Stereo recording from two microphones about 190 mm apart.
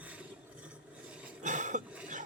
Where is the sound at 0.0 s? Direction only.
5° right (ahead or behind).